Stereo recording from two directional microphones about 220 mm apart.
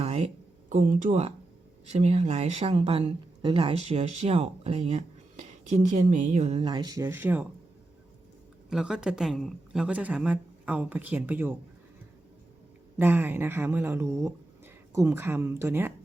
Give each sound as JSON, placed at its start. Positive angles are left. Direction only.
{"t": 0.0, "sound": "a sound", "side_deg": -30}
{"t": 0.7, "sound": "speech", "side_deg": -35}
{"t": 8.7, "sound": "a woman's voice", "side_deg": -5}
{"t": 13.0, "sound": "a woman's voice", "side_deg": -10}